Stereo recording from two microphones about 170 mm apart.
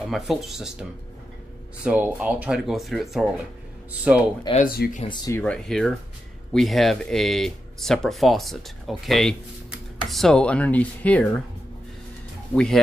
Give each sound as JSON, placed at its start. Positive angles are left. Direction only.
{"t": 0.1, "sound": "speech", "side_deg": 0}
{"t": 1.9, "sound": "speech", "side_deg": -10}
{"t": 4.6, "sound": "speech", "side_deg": 60}
{"t": 5.0, "sound": "speech", "side_deg": 25}
{"t": 5.3, "sound": "speech", "side_deg": 5}
{"t": 12.5, "sound": "speech", "side_deg": 5}